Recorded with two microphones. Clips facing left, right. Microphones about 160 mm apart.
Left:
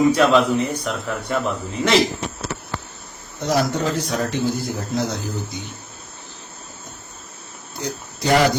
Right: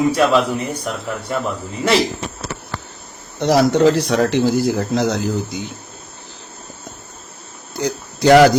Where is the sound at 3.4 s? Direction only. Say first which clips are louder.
Right 7 dB; 75° right (ahead or behind); by 5.6 s 90° right.